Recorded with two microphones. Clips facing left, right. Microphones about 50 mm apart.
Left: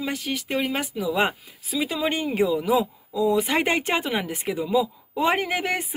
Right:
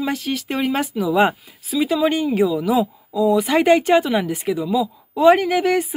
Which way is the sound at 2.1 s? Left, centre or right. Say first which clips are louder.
Right 4 dB; centre.